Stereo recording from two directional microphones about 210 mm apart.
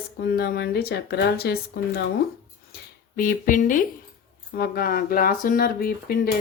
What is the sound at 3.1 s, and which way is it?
Speech, 40° left (ahead or behind).